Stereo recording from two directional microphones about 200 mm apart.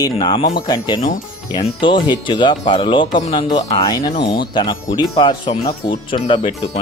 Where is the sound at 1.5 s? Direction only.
20° left (ahead or behind).